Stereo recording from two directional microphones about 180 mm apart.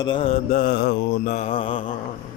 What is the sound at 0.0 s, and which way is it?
Mantra, 30° left (ahead or behind).